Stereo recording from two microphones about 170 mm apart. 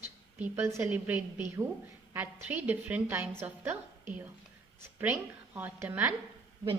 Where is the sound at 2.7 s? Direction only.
10° right (ahead or behind).